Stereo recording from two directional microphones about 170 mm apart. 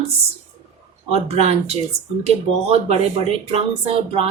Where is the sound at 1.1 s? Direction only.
40° right (ahead or behind).